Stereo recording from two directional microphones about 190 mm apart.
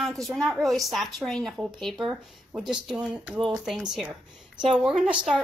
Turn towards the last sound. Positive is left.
turn(degrees=-5)  # may be behind; listen again after turning